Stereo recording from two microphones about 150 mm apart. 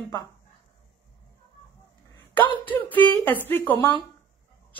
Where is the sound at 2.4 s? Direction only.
10° left (ahead or behind).